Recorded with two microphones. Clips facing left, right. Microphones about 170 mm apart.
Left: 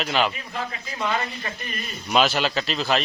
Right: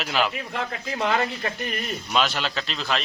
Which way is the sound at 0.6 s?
70° right (ahead or behind).